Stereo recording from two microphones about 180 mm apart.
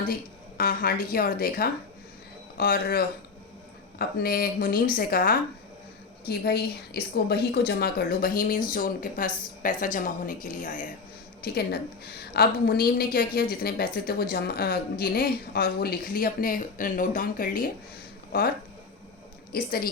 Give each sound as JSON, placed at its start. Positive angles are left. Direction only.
{"t": 0.1, "sound": "a woman's voice", "side_deg": 55}
{"t": 11.4, "sound": "a woman's voice", "side_deg": 60}
{"t": 19.5, "sound": "a woman's voice", "side_deg": 55}